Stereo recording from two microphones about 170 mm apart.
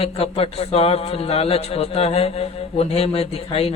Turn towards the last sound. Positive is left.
turn(degrees=35)  # may be behind; listen again after turning